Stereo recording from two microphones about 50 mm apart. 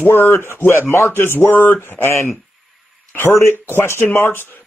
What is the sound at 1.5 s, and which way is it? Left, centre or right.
Speech, left.